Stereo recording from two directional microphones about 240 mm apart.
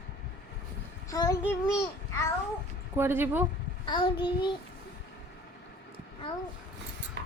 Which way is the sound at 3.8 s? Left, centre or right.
Centre.